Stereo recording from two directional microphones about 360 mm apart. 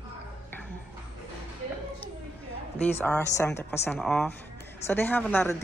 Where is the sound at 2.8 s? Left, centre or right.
Centre.